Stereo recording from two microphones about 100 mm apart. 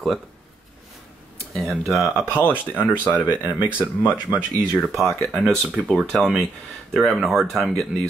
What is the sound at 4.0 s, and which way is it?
Speech, 15° right (ahead or behind).